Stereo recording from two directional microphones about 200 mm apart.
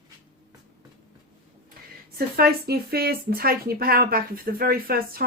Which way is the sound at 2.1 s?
50° right (ahead or behind).